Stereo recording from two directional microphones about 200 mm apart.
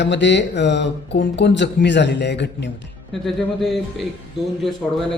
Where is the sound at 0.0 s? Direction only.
60° left (ahead or behind).